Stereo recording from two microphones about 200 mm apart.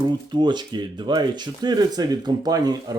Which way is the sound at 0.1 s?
20° right (ahead or behind).